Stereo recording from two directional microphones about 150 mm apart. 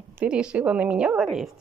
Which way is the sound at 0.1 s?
5° right (ahead or behind).